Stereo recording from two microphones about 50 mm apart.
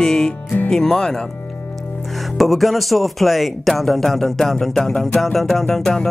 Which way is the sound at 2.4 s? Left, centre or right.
Centre.